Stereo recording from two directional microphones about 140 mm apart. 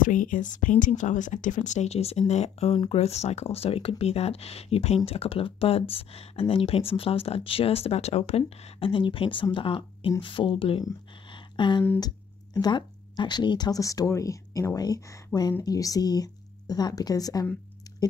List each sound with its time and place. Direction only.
0.0 s speech: 70° left (ahead or behind); by 10.9 s 40° left (ahead or behind)
11.3 s a sound: 35° left (ahead or behind)
12.5 s speech: 30° left (ahead or behind)